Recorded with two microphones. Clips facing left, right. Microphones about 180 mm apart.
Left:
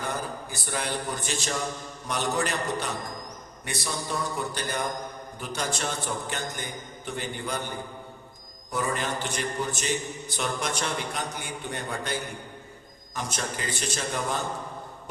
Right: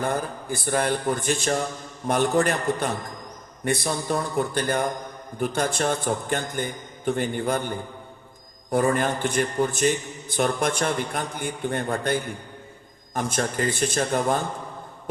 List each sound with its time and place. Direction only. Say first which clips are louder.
0.0 s a man's voice: right 6 dB; 55° right (ahead or behind)